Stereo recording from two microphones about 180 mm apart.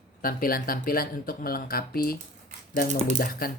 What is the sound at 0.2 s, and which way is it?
Speech, 55° left (ahead or behind).